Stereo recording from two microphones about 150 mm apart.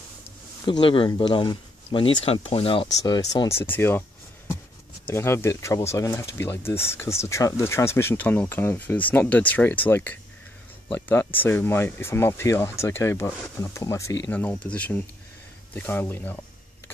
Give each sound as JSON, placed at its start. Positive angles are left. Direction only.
{"t": 0.7, "sound": "speech", "side_deg": 35}
{"t": 3.0, "sound": "speech", "side_deg": 25}
{"t": 3.4, "sound": "speech", "side_deg": 15}
{"t": 5.0, "sound": "speech", "side_deg": 15}